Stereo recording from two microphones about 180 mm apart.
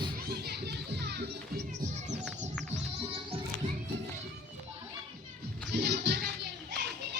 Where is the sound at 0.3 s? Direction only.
60° right (ahead or behind).